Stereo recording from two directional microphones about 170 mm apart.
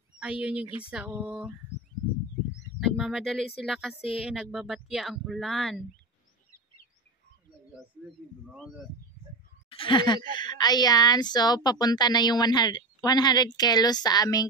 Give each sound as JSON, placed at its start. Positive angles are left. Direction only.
{"t": 0.2, "sound": "a sound", "side_deg": -5}
{"t": 2.8, "sound": "speech", "side_deg": 0}
{"t": 8.5, "sound": "speech", "side_deg": 0}
{"t": 9.7, "sound": "speech", "side_deg": 30}